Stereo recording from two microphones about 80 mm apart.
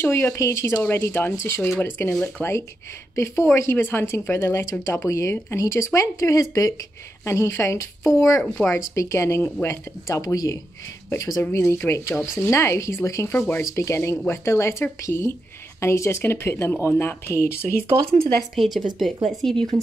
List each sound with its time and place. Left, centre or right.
0.0 s speech: left
0.7 s speech: left
3.2 s speech: left
7.2 s speech: left
8.4 s speech: centre
8.6 s speech: left
18.5 s a woman's voice: centre
19.5 s speech: right